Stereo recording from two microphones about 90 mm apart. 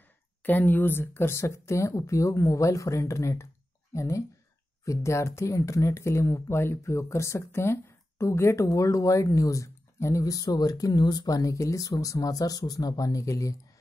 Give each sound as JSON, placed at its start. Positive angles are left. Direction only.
{"t": 0.4, "sound": "speech", "side_deg": 20}